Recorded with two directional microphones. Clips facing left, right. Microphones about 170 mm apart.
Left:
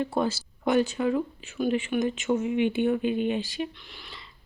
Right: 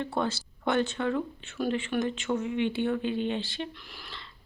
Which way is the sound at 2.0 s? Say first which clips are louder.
Left 3 dB; 20° left (ahead or behind).